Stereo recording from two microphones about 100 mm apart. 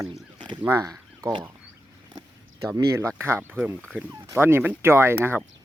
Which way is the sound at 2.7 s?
30° right (ahead or behind).